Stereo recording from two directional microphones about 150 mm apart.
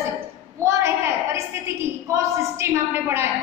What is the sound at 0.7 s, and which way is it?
A woman's voice, 20° right (ahead or behind).